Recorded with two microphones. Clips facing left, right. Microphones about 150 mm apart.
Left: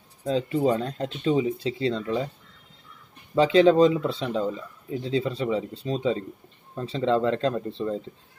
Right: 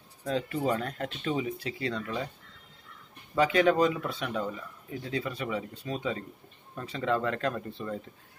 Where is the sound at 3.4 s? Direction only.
25° left (ahead or behind).